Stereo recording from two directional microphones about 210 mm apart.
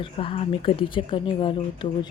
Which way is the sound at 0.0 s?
25° left (ahead or behind).